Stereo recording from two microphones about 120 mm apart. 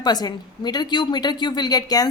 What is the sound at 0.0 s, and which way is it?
A woman's voice, 35° left (ahead or behind).